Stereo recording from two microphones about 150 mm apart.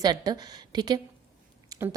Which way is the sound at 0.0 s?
25° right (ahead or behind).